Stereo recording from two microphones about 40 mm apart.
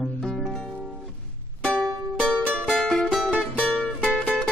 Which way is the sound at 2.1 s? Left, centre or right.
Left.